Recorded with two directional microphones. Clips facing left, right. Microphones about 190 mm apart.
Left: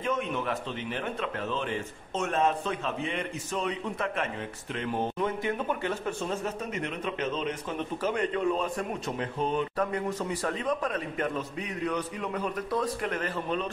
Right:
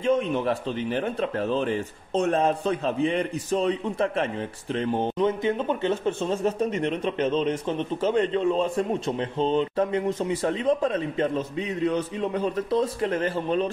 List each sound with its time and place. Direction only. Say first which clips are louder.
0.0 s a man's voice: right 7 dB; 30° right (ahead or behind)